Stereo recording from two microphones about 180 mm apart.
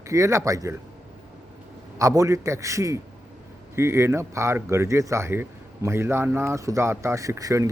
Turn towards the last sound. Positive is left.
turn(degrees=-15)  # may be behind; listen again after turning